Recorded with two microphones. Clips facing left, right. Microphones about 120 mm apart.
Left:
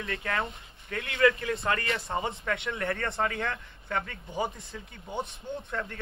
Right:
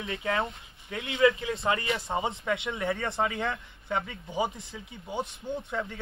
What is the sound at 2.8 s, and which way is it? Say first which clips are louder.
Speech: right 1 dB; 5° right (ahead or behind).